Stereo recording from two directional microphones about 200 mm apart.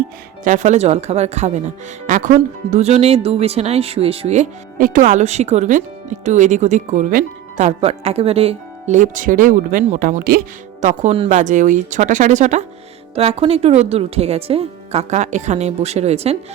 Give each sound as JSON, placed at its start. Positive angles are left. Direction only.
{"t": 0.4, "sound": "speech", "side_deg": -40}